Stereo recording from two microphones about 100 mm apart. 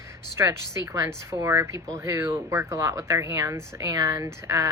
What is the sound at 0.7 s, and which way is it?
Speech, 30° right (ahead or behind).